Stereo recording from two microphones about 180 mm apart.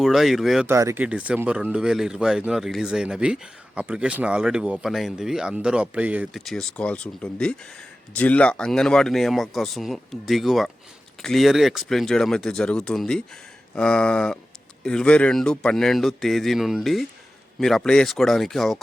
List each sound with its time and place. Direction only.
0.0 s speech: centre (ahead or behind)
0.7 s speech: 15° right (ahead or behind); by 18.8 s centre (ahead or behind)